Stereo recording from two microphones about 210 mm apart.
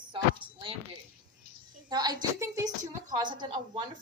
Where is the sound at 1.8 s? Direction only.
20° right (ahead or behind).